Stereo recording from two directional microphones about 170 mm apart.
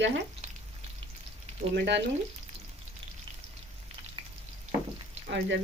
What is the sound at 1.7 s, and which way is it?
Speech, 90° right.